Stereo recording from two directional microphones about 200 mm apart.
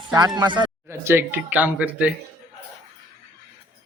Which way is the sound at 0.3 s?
20° right (ahead or behind).